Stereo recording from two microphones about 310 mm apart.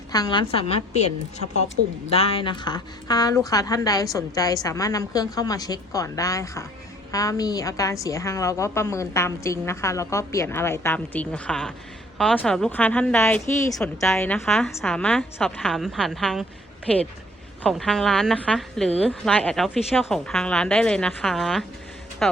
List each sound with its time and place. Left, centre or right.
0.1 s a woman's voice: centre